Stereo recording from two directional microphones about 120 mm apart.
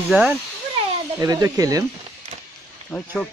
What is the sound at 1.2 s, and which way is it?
Speech, 30° right (ahead or behind).